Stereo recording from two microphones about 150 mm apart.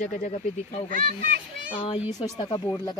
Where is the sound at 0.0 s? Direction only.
50° left (ahead or behind).